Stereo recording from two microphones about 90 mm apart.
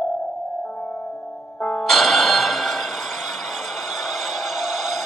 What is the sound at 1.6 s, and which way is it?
Music, 20° left (ahead or behind).